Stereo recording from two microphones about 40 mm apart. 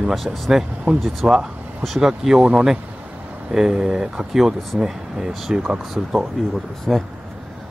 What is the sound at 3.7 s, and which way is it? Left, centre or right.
Speech, centre.